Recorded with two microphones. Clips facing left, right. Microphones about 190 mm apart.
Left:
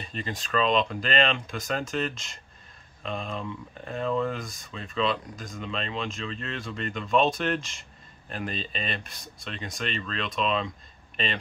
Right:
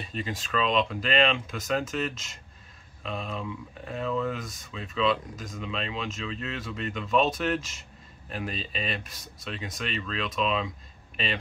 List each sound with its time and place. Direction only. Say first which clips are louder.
0.0 s speech: right 1 dB; 5° right (ahead or behind)